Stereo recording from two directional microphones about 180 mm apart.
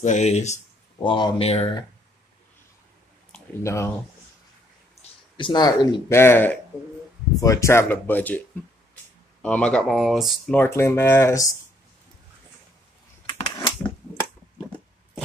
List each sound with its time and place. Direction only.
0.0 s speech: 40° left (ahead or behind)
0.9 s speech: 25° left (ahead or behind)
3.6 s speech: 15° left (ahead or behind)
5.4 s speech: 25° left (ahead or behind)
6.0 s speech: 15° left (ahead or behind)
13.3 s typewriter: 25° left (ahead or behind)